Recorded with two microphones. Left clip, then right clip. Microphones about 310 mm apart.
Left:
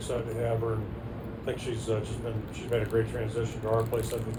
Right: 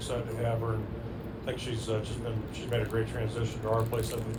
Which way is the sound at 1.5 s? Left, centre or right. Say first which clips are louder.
Left 2 dB; right.